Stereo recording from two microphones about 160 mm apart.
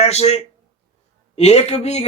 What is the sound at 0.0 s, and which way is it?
Speech, 40° left (ahead or behind).